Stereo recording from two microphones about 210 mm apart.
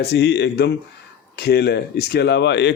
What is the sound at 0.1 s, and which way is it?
Speech, 55° left (ahead or behind).